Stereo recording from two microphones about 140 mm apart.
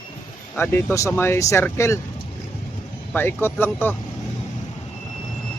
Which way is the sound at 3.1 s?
15° left (ahead or behind).